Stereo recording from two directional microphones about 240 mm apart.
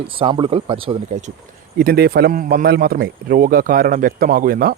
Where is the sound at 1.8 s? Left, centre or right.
Right.